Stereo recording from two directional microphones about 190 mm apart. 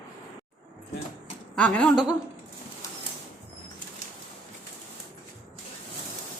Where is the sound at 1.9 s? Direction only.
25° left (ahead or behind).